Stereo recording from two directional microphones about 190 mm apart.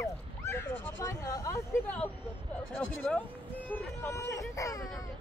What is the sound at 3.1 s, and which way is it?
A child's voice, 10° left (ahead or behind).